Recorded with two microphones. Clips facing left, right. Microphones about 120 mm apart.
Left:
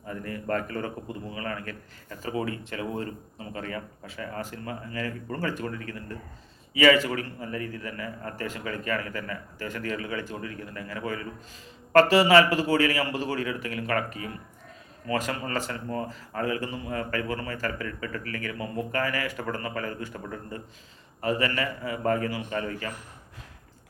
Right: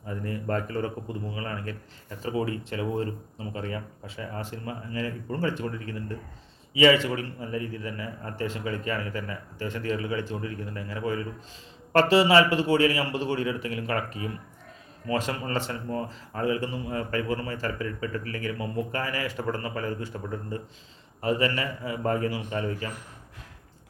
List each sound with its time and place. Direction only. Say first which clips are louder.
0.1 s speech: even; 25° right (ahead or behind)